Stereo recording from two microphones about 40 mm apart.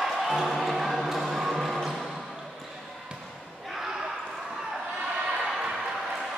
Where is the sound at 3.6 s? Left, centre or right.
Centre.